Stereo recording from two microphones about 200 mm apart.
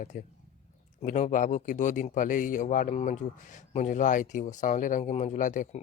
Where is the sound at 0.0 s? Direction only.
45° left (ahead or behind).